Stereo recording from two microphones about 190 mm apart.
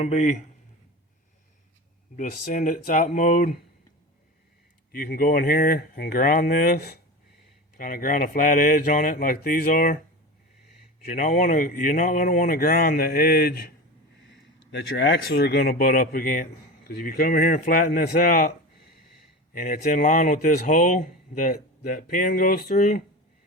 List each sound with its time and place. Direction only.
0.0 s speech: 40° left (ahead or behind)
2.1 s speech: 45° left (ahead or behind)
4.9 s speech: 50° left (ahead or behind)
11.0 s speech: 45° left (ahead or behind)
14.3 s speech: 70° left (ahead or behind); by 18.4 s 45° left (ahead or behind)
19.5 s speech: 45° left (ahead or behind)